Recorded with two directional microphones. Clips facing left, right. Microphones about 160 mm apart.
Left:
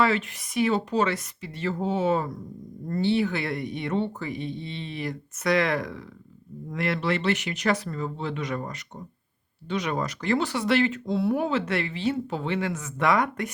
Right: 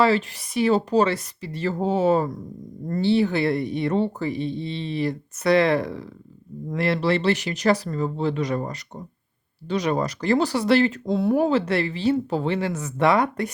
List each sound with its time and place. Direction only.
0.0 s speech: 30° right (ahead or behind)